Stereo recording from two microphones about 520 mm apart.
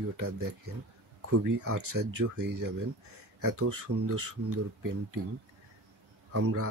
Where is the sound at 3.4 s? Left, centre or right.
Right.